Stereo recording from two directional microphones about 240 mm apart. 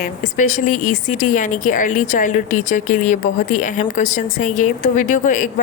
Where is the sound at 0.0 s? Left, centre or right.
Left.